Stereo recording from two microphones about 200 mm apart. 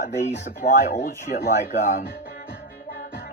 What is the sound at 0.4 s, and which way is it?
Speech, 35° left (ahead or behind).